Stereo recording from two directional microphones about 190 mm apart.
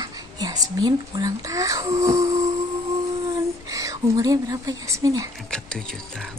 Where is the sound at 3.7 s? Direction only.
15° right (ahead or behind).